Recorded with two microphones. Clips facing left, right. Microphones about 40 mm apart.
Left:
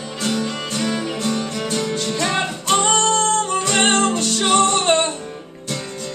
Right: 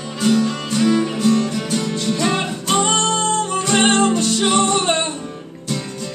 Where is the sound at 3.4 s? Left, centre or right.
Centre.